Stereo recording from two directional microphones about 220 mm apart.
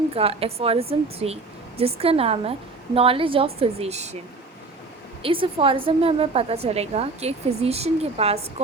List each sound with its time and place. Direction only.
0.1 s a woman's voice: 25° right (ahead or behind)
5.2 s a woman's voice: 25° right (ahead or behind)